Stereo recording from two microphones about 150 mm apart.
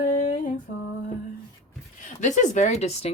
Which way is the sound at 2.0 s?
55° left (ahead or behind).